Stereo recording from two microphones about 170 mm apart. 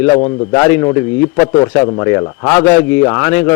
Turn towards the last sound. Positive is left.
turn(degrees=15)  # may be behind; listen again after turning